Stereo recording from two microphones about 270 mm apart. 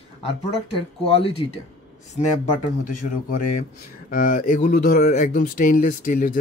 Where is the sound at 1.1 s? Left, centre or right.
Left.